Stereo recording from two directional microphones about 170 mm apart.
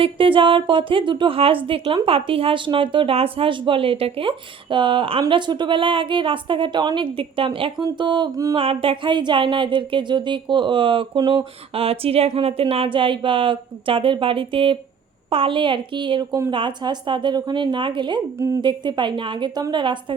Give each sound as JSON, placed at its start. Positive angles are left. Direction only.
{"t": 0.0, "sound": "a woman's voice", "side_deg": -30}
{"t": 18.3, "sound": "a woman's voice", "side_deg": -15}